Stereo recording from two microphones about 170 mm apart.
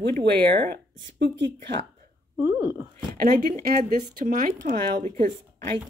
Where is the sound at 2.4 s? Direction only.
10° right (ahead or behind).